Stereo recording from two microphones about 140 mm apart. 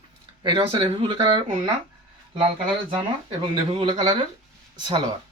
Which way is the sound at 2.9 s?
35° right (ahead or behind).